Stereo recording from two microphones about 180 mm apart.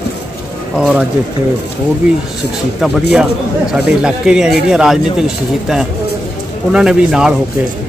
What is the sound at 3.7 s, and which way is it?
Speech, 5° right (ahead or behind).